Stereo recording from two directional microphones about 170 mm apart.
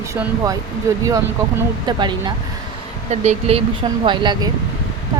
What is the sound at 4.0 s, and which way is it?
Speech, 30° right (ahead or behind).